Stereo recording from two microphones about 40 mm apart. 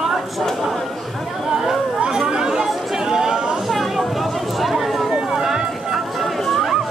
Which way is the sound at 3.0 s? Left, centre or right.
Centre.